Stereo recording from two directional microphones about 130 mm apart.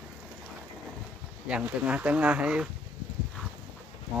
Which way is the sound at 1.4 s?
10° right (ahead or behind).